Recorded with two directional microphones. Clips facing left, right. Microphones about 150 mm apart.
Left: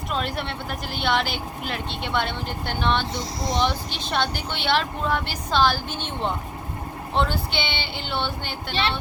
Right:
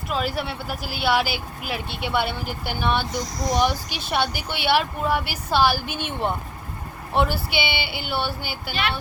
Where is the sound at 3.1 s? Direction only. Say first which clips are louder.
Right 2 dB; 25° left (ahead or behind).